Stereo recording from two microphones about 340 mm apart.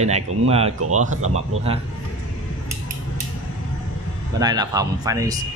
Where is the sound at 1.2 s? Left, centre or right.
Right.